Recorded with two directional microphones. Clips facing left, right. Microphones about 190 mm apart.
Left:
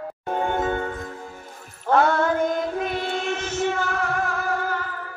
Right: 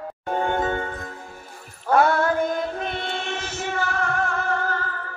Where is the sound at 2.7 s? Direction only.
5° left (ahead or behind).